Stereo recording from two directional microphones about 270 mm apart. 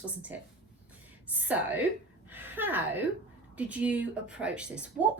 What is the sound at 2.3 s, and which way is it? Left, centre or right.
Gasp, centre.